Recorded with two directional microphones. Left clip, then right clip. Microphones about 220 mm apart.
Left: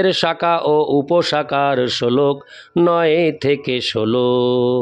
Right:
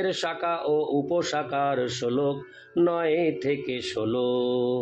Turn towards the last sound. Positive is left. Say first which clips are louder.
# left 9 dB
turn(degrees=50)  # may be behind; listen again after turning